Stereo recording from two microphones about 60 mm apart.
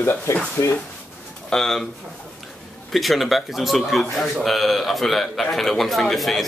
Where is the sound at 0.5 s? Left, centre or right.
Left.